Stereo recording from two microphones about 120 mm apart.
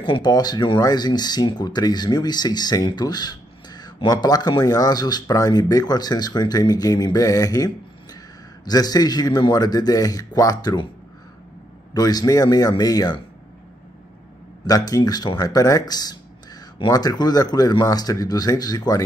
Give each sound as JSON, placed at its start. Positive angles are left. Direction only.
{"t": 0.0, "sound": "speech", "side_deg": 40}
{"t": 11.9, "sound": "speech", "side_deg": 30}
{"t": 14.7, "sound": "speech", "side_deg": 30}